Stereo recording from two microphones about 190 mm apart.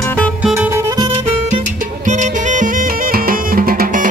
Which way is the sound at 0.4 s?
5° right (ahead or behind).